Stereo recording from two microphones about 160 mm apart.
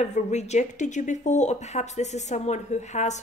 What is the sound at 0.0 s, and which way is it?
A woman's voice, 45° left (ahead or behind).